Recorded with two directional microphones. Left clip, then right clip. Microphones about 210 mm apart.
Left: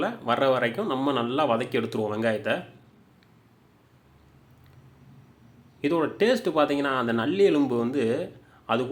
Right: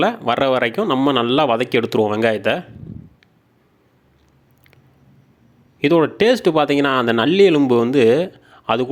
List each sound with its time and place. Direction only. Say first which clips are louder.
0.0 s speech: right 7 dB; 40° right (ahead or behind)
5.8 s speech: right 9 dB; 35° right (ahead or behind)